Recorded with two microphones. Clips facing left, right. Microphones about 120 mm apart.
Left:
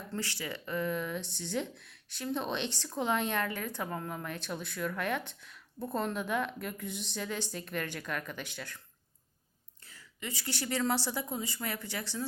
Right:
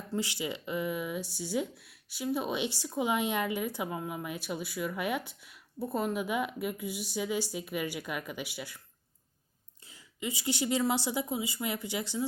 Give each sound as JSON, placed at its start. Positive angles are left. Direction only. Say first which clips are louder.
{"t": 0.1, "sound": "speech", "louder": "right 5 dB", "side_deg": -15}
{"t": 9.8, "sound": "speech", "louder": "right 5 dB", "side_deg": -15}